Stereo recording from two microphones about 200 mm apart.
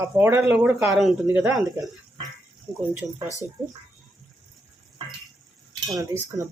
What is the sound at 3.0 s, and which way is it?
Speech, 15° right (ahead or behind).